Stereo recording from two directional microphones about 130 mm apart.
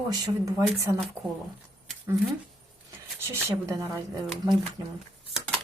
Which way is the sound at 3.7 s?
25° right (ahead or behind).